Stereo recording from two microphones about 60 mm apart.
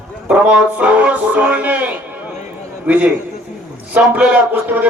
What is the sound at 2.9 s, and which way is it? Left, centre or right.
Music, right.